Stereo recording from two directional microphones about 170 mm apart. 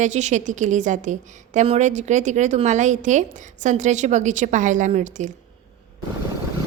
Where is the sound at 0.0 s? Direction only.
45° right (ahead or behind).